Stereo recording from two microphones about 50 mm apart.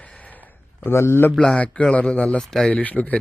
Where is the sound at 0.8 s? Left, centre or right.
Left.